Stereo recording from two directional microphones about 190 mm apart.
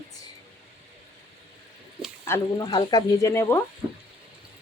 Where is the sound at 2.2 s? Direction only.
20° left (ahead or behind).